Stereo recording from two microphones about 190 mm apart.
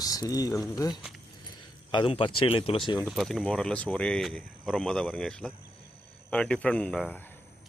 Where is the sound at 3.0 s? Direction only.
Centre (ahead or behind).